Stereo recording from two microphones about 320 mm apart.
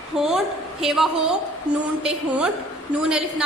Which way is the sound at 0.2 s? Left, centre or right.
Centre.